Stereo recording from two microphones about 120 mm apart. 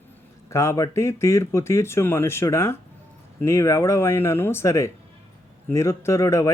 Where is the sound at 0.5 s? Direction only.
25° left (ahead or behind).